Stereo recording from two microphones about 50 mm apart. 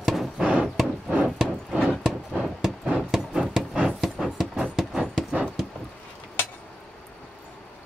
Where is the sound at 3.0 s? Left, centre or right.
Centre.